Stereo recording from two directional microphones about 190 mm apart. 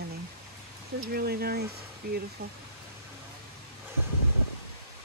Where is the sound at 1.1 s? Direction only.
55° right (ahead or behind).